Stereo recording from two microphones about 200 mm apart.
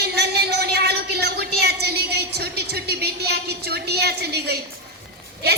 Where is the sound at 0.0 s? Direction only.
55° right (ahead or behind).